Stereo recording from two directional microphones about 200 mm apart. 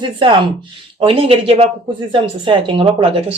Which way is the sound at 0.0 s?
25° right (ahead or behind).